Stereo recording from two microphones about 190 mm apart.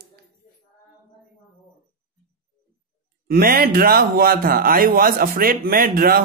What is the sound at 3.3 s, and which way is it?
Speech, 50° right (ahead or behind).